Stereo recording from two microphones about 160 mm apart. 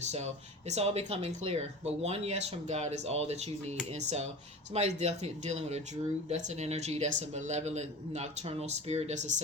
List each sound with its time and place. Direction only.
0.0 s speech: 45° right (ahead or behind)